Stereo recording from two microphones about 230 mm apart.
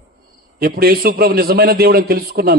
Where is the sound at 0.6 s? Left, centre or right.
Right.